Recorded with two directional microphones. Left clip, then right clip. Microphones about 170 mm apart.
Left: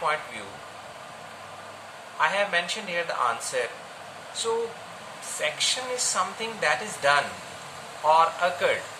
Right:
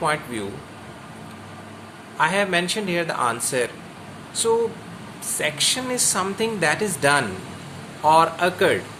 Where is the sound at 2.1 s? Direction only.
70° right (ahead or behind).